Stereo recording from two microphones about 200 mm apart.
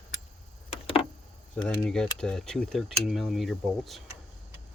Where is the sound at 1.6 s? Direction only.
5° left (ahead or behind).